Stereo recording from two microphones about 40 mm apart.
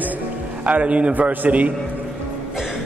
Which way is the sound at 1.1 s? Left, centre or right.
Right.